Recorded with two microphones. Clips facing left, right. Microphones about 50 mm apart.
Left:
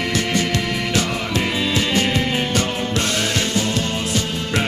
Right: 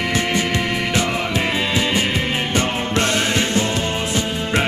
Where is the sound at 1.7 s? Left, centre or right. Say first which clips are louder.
Even; centre.